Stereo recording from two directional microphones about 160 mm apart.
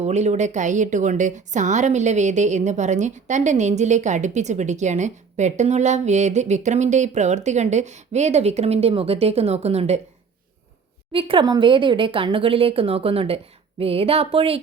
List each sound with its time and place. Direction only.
0.0 s a woman's voice: 45° right (ahead or behind)
11.1 s speech: 35° right (ahead or behind)